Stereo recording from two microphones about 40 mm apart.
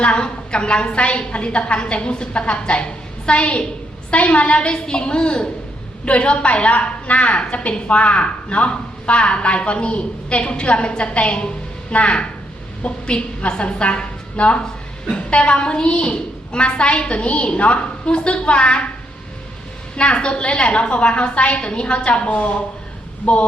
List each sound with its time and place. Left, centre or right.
0.0 s a woman's voice: left
20.0 s a woman's voice: left